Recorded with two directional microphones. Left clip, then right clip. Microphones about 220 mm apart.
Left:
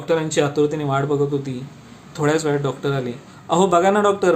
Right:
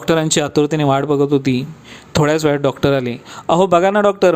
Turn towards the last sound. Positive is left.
turn(degrees=-40)  # may be behind; listen again after turning